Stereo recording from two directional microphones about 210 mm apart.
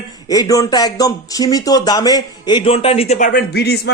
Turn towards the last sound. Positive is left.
turn(degrees=50)  # may be behind; listen again after turning